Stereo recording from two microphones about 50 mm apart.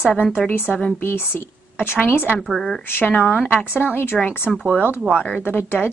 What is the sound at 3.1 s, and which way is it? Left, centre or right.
Speech, left.